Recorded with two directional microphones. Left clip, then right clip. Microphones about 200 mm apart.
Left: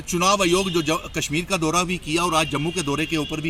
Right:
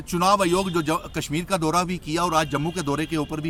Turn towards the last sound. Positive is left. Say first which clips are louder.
# left 2 dB
turn(degrees=-20)  # may be behind; listen again after turning